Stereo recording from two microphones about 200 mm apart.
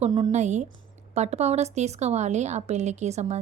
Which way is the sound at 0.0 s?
30° right (ahead or behind).